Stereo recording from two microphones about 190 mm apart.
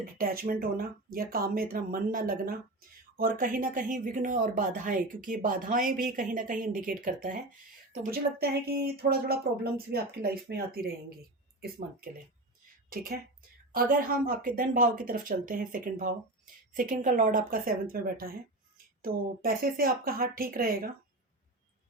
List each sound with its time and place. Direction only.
0.0 s speech: 50° right (ahead or behind)
12.9 s speech: 50° right (ahead or behind)